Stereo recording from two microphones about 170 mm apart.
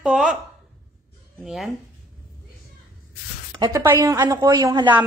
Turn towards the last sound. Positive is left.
turn(degrees=-20)  # may be behind; listen again after turning